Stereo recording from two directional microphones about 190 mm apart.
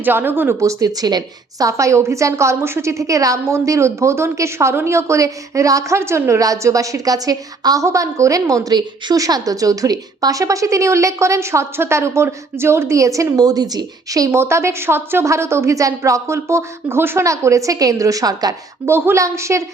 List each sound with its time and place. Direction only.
0.0 s a woman's voice: 10° right (ahead or behind)